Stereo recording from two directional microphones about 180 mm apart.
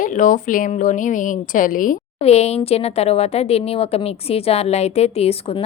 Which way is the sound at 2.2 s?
35° left (ahead or behind).